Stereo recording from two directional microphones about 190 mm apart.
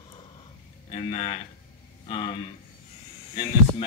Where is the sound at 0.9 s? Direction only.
30° left (ahead or behind).